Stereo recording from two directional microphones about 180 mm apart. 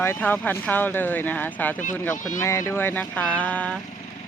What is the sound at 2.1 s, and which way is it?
Speech, 45° left (ahead or behind).